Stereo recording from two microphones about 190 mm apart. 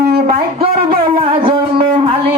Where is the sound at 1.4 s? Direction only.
30° right (ahead or behind).